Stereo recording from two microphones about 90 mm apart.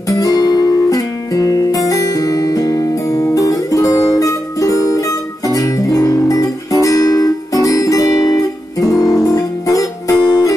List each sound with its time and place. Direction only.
0.1 s music: 40° left (ahead or behind)
8.9 s guitar: 5° left (ahead or behind)
9.3 s music: 40° left (ahead or behind)